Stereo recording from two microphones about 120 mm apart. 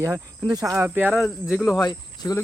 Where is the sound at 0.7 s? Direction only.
15° right (ahead or behind); by 1.7 s centre (ahead or behind).